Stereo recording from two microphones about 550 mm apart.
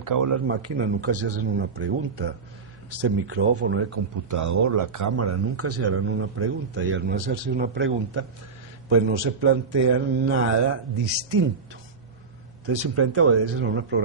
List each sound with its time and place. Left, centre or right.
0.0 s a man's voice: right
12.9 s speech: right